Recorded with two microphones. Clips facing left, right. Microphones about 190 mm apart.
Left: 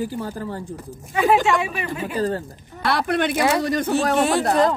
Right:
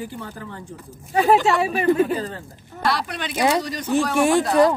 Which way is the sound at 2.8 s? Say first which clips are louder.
Left 4 dB; 55° left (ahead or behind).